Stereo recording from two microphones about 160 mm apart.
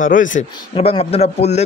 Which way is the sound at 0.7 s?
40° left (ahead or behind).